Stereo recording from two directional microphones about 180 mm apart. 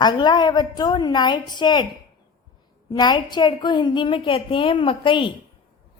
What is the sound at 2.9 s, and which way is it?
A woman's voice, 25° left (ahead or behind).